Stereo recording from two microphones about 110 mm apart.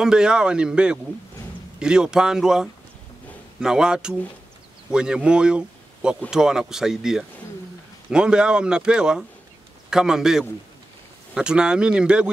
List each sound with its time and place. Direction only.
0.0 s speech: 5° right (ahead or behind)